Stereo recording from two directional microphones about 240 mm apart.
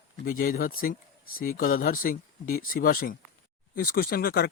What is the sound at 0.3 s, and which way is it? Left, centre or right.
Speech, left.